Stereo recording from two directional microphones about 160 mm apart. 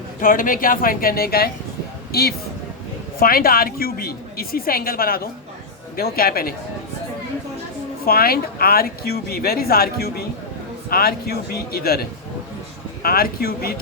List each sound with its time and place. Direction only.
0.2 s a woman's voice: 60° left (ahead or behind)
3.2 s a woman's voice: 65° left (ahead or behind)
8.0 s a woman's voice: 70° left (ahead or behind)